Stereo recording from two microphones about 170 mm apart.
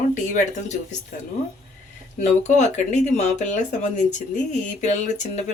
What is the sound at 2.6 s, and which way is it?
Speech, 45° left (ahead or behind).